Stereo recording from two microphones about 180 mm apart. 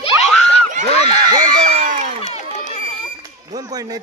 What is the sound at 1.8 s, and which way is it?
Speech, 45° right (ahead or behind).